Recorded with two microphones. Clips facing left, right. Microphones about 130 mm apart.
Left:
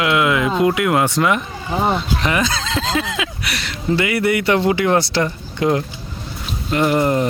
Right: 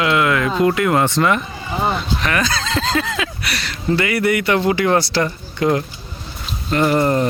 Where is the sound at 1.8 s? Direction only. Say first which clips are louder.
Left 1 dB; 20° left (ahead or behind).